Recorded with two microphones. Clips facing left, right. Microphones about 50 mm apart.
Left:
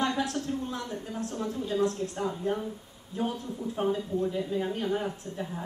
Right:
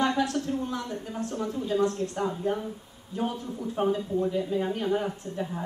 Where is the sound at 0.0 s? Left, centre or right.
Centre.